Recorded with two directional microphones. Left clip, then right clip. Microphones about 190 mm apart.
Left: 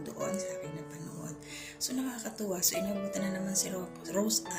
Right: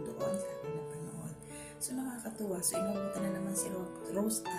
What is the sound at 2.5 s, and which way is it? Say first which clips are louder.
Speech: left 2 dB; 10° right (ahead or behind).